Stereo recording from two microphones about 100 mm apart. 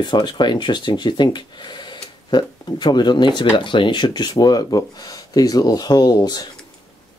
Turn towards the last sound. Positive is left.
turn(degrees=45)  # may be behind; listen again after turning